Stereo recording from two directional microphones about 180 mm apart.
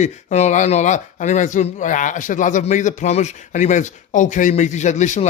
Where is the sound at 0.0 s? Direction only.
40° left (ahead or behind).